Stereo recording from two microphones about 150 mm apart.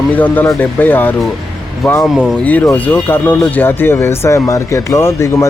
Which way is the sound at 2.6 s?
15° left (ahead or behind).